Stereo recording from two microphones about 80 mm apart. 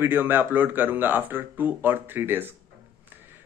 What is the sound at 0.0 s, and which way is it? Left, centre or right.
A man's voice, right.